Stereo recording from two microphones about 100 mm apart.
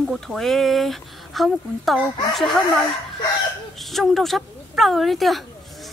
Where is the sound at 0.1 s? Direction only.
5° left (ahead or behind).